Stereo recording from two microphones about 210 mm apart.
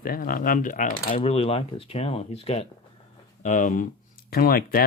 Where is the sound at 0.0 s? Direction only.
45° left (ahead or behind).